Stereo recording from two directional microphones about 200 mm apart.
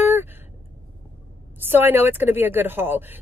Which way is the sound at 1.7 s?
10° right (ahead or behind).